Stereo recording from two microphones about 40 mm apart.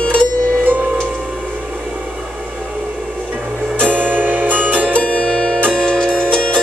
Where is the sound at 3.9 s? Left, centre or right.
Right.